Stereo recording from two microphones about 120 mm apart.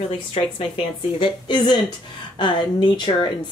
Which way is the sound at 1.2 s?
40° left (ahead or behind).